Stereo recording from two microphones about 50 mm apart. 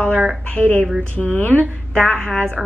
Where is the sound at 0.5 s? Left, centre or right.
Left.